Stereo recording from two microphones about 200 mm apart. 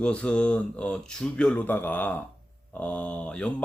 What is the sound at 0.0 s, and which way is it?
Speech, 5° left (ahead or behind).